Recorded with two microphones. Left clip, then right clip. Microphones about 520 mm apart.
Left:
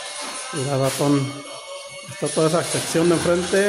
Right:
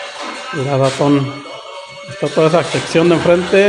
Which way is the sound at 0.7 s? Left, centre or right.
Left.